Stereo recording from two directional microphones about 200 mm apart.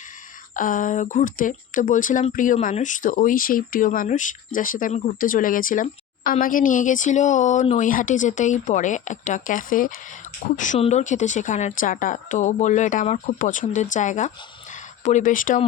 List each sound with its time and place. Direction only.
0.5 s speech: 40° left (ahead or behind)